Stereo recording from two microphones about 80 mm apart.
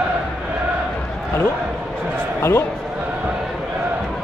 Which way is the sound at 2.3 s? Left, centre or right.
Left.